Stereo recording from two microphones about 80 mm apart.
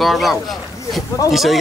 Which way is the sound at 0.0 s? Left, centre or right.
Centre.